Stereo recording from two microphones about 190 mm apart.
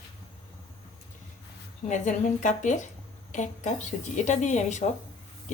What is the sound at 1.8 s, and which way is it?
Speech, 40° left (ahead or behind).